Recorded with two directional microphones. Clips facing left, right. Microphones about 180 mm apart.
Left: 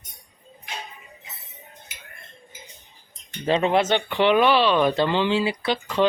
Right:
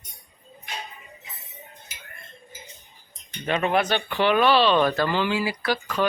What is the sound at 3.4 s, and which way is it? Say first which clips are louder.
Speech: left 3 dB; 25° left (ahead or behind).